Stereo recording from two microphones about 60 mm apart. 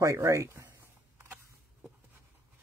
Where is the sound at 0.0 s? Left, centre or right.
Right.